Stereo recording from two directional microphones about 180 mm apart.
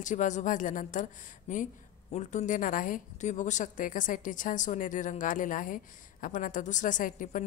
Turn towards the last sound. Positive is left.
turn(degrees=45)  # may be behind; listen again after turning